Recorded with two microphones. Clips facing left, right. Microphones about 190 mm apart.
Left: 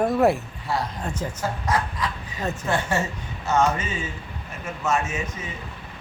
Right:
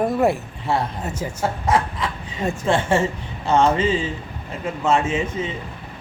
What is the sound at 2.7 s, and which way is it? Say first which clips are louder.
Speech: right 6 dB; 25° right (ahead or behind).